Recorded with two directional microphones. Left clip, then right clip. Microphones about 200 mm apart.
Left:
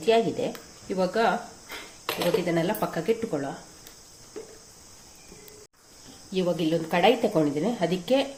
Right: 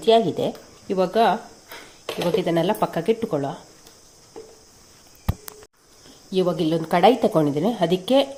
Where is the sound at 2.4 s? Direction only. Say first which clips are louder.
Right 5 dB; 35° right (ahead or behind).